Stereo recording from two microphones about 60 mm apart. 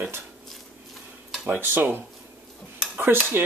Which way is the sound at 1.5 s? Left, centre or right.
Right.